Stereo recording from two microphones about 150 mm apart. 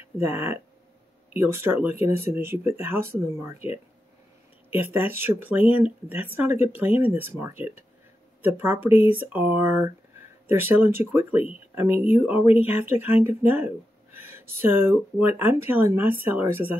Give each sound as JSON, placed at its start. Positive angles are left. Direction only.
{"t": 0.2, "sound": "speech", "side_deg": -15}
{"t": 4.6, "sound": "speech", "side_deg": -15}